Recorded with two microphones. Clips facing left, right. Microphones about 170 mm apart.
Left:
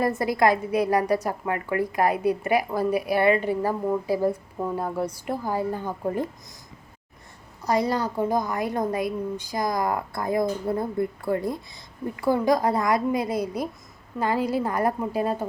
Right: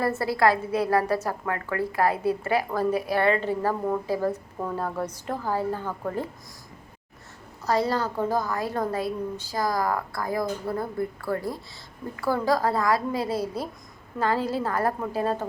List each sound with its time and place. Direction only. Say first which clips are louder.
0.0 s a woman's voice: left 1 dB; 15° left (ahead or behind)
7.6 s a woman's voice: left 1 dB; 15° left (ahead or behind)